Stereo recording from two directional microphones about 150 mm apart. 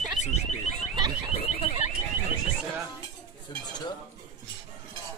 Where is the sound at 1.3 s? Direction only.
45° left (ahead or behind).